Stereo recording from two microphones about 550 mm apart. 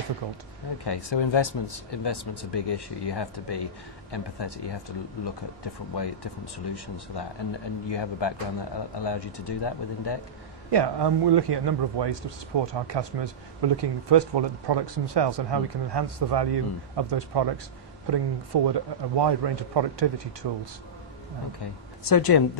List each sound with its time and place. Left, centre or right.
0.8 s speech: left
10.7 s a man's voice: right
22.0 s speech: left